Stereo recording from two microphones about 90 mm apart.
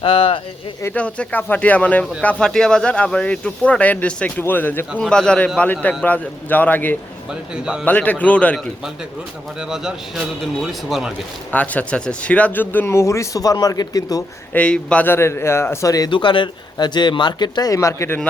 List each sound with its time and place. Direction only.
0.0 s speech: 90° left
0.9 s speech: 15° left (ahead or behind)
4.9 s speech: 10° left (ahead or behind)
7.5 s a man's voice: 10° right (ahead or behind)
7.9 s speech: 15° left (ahead or behind)
9.6 s a man's voice: 5° right (ahead or behind)
11.5 s speech: 15° left (ahead or behind); by 14.2 s 45° left (ahead or behind)
14.5 s speech: 10° left (ahead or behind)
15.0 s speech: 25° left (ahead or behind)
16.0 s speech: 65° left (ahead or behind)
17.7 s speech: 35° left (ahead or behind)